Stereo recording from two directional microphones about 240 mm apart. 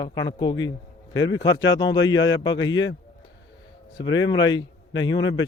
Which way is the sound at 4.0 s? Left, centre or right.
Centre.